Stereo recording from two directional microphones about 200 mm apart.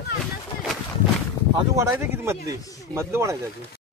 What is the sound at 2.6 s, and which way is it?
Speech, 15° left (ahead or behind).